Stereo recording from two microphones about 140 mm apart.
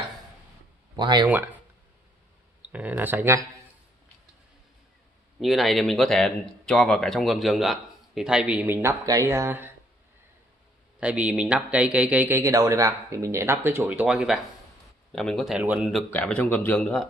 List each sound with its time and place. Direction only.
0.9 s speech: 35° right (ahead or behind)
2.6 s a man's voice: 10° right (ahead or behind)
5.4 s speech: centre (ahead or behind); by 9.7 s 20° right (ahead or behind)
11.0 s a man's voice: 10° right (ahead or behind)